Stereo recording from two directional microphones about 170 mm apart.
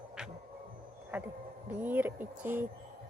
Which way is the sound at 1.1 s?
10° right (ahead or behind).